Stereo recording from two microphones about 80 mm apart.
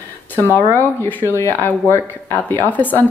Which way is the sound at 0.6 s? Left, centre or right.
Left.